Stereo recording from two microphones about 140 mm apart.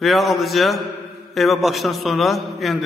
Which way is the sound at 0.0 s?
Centre (ahead or behind).